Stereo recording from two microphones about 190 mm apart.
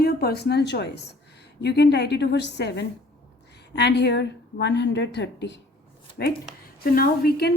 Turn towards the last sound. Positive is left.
turn(degrees=55)  # may be behind; listen again after turning